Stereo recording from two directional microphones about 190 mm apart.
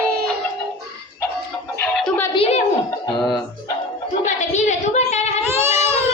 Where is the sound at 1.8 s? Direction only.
5° left (ahead or behind).